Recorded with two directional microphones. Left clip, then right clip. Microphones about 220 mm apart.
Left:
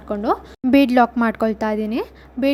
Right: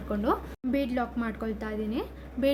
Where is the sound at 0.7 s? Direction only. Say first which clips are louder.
Left 15 dB; 40° left (ahead or behind).